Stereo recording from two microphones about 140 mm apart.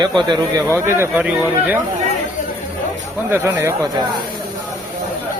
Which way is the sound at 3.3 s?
15° right (ahead or behind).